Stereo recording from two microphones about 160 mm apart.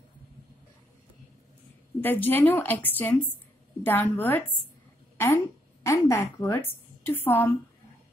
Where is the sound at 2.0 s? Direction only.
10° left (ahead or behind).